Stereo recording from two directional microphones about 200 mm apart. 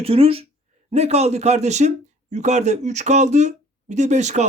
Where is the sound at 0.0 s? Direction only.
30° right (ahead or behind).